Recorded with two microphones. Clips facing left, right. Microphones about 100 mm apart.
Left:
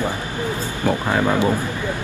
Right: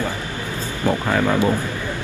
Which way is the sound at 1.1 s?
15° left (ahead or behind).